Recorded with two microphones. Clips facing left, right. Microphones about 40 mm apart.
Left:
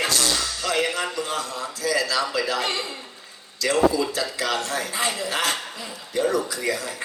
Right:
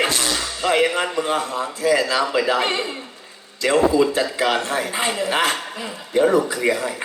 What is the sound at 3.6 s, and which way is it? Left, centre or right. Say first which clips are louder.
A man's voice: right 4 dB; right.